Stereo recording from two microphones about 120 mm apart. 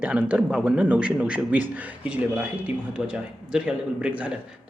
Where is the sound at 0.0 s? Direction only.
10° right (ahead or behind).